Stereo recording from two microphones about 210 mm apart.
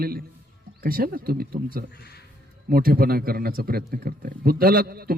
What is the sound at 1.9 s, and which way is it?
Speech, 50° left (ahead or behind).